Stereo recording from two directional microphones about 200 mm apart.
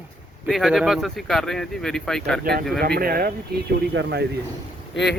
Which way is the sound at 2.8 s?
50° right (ahead or behind).